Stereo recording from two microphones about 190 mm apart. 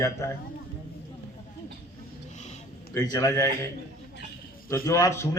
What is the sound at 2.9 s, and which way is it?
Speech, 15° left (ahead or behind).